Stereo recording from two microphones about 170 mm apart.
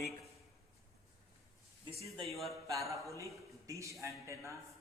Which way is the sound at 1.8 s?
25° right (ahead or behind).